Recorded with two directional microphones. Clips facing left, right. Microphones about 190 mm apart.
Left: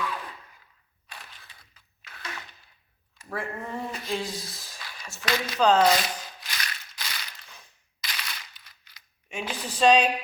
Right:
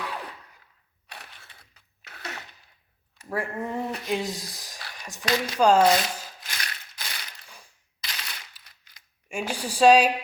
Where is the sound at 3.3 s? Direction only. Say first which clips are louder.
Right 4 dB; 15° right (ahead or behind).